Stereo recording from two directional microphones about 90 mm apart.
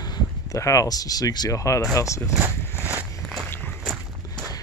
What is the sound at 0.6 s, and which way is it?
Speech, 35° left (ahead or behind).